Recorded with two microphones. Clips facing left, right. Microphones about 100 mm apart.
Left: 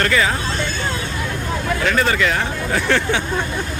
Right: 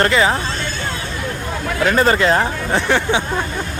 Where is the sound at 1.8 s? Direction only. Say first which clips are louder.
Right 5 dB; 35° right (ahead or behind).